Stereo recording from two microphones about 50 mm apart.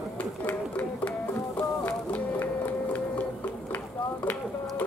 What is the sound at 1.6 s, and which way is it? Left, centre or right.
Music, left.